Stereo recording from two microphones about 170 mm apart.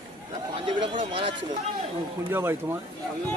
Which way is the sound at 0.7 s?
30° right (ahead or behind).